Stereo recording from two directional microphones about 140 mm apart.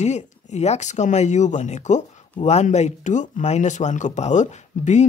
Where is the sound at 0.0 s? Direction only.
55° left (ahead or behind).